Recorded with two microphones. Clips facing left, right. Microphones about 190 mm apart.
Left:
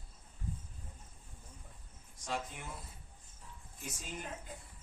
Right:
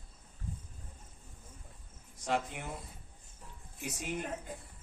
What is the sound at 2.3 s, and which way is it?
Speech, 65° right (ahead or behind).